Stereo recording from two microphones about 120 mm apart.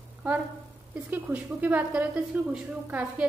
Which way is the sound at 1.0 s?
15° right (ahead or behind).